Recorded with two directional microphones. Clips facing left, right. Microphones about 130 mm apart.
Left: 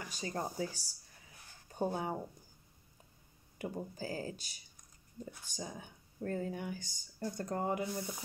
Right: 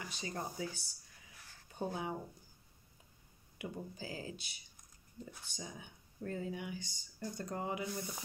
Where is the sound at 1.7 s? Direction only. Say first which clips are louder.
Left 5 dB; 40° left (ahead or behind).